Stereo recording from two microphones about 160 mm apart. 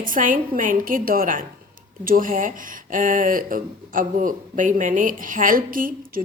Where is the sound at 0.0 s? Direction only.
55° right (ahead or behind).